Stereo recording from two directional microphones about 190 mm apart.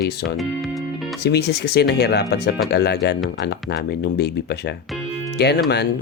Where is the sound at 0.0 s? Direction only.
60° left (ahead or behind).